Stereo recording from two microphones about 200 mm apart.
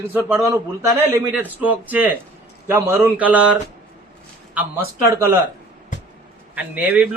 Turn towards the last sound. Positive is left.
turn(degrees=-10)  # may be behind; listen again after turning